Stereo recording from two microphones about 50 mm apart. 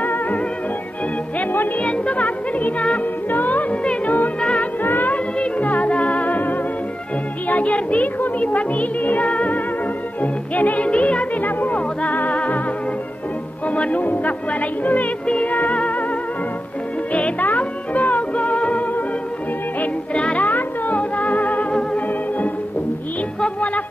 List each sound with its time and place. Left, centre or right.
0.0 s music: left
1.8 s music: left
3.8 s music: left
4.8 s music: left
5.1 s music: left
13.7 s speech: left
15.2 s music: left
17.1 s music: left
20.3 s music: left